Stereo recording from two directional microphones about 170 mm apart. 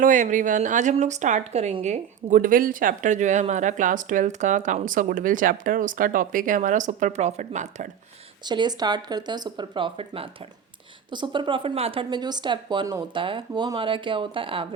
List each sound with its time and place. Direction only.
0.0 s a woman's voice: 50° right (ahead or behind)
8.4 s a woman's voice: 25° right (ahead or behind)